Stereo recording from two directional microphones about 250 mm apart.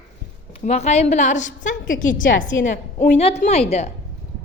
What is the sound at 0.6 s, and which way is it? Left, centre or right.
A woman's voice, left.